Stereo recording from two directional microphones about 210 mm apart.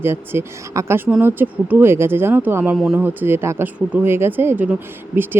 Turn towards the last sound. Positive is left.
turn(degrees=-10)  # may be behind; listen again after turning